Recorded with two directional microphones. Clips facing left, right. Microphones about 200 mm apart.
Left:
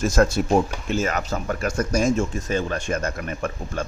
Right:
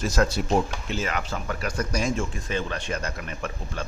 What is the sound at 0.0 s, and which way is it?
A man's voice, 50° left (ahead or behind).